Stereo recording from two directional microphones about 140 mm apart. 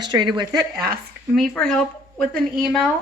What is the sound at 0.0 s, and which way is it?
Speech, 30° right (ahead or behind).